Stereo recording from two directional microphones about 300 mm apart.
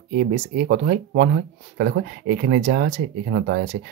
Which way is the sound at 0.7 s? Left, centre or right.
Right.